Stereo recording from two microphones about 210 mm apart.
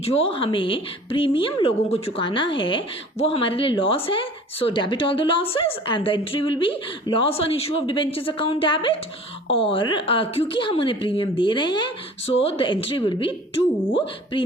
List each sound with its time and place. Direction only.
0.0 s speech: 30° left (ahead or behind)